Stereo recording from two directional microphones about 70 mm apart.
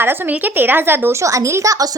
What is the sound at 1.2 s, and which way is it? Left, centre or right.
Speech, right.